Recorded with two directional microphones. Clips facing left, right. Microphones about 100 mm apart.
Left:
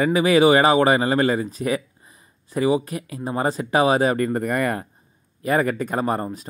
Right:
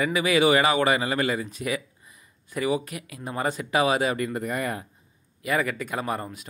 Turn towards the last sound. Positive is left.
turn(degrees=35)  # may be behind; listen again after turning